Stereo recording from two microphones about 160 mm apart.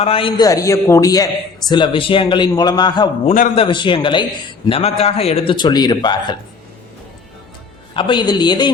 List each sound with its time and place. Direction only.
0.0 s a man's voice: 35° left (ahead or behind)
3.2 s a man's voice: 55° left (ahead or behind)
3.5 s a man's voice: 35° left (ahead or behind)
7.9 s a man's voice: 30° left (ahead or behind)